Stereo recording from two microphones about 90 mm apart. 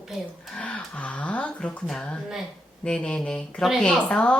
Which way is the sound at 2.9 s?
10° left (ahead or behind).